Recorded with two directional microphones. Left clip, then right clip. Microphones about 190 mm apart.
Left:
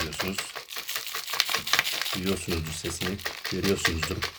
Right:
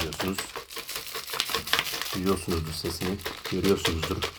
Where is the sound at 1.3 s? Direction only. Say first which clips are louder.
Left 2 dB; centre (ahead or behind).